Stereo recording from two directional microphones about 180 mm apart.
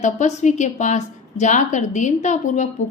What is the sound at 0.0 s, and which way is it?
A woman's voice, 40° left (ahead or behind).